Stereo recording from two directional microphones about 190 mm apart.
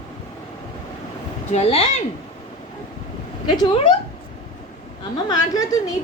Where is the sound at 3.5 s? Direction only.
20° left (ahead or behind).